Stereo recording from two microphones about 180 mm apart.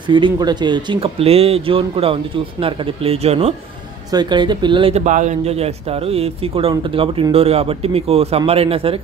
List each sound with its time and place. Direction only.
0.1 s a man's voice: 25° right (ahead or behind)
4.1 s speech: 25° right (ahead or behind)
5.0 s a man's voice: 40° right (ahead or behind)